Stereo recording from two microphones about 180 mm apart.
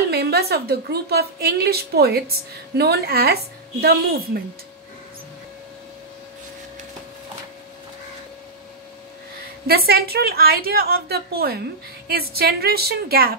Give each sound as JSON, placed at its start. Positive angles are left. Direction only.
{"t": 0.1, "sound": "a woman's voice", "side_deg": -60}
{"t": 9.7, "sound": "a woman's voice", "side_deg": -60}